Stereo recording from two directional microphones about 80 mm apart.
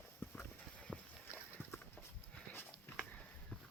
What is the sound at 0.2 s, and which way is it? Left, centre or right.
Clip-clop, left.